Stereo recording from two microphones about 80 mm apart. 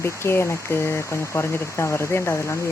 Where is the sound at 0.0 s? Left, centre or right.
Left.